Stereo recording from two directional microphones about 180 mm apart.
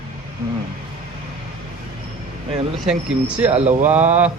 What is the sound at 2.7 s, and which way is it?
Speech, 5° right (ahead or behind).